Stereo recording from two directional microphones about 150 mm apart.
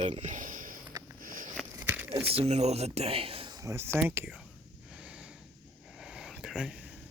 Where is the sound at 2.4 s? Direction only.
45° right (ahead or behind).